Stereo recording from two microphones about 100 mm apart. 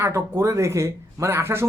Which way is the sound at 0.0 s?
25° right (ahead or behind).